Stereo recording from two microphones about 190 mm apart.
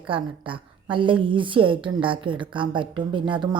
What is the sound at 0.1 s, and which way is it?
A woman's voice, 25° right (ahead or behind).